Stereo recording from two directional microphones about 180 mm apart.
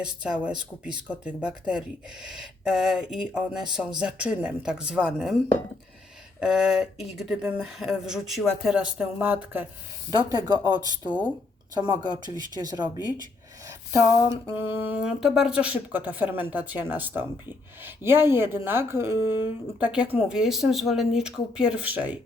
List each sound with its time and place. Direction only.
0.0 s speech: 5° right (ahead or behind)
10.1 s speech: 25° right (ahead or behind)
12.3 s speech: 20° right (ahead or behind)